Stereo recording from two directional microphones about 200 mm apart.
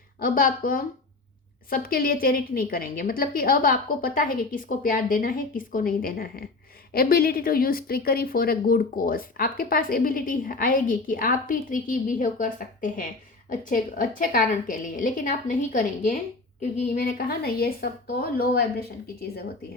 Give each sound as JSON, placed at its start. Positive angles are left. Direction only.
{"t": 0.2, "sound": "a woman's voice", "side_deg": 45}